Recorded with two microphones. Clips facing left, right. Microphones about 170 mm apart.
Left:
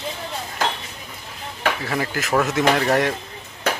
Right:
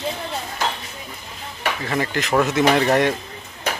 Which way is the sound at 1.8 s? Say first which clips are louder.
Right 1 dB; 5° left (ahead or behind).